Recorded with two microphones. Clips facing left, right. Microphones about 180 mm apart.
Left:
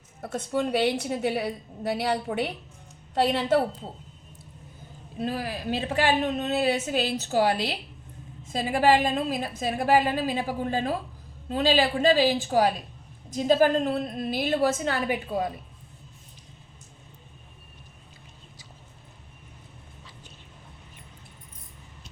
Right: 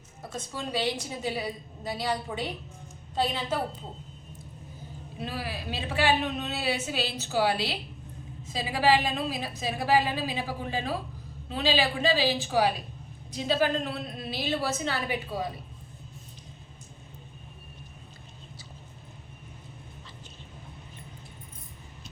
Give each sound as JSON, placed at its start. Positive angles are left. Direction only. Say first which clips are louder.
{"t": 0.2, "sound": "a woman's voice", "louder": "left 9 dB", "side_deg": 60}
{"t": 5.2, "sound": "a woman's voice", "louder": "left 5 dB", "side_deg": 45}